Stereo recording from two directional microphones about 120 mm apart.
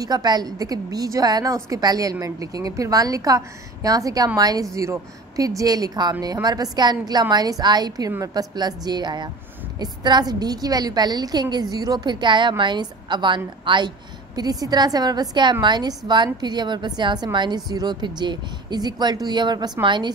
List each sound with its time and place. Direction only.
0.0 s a woman's voice: 35° right (ahead or behind)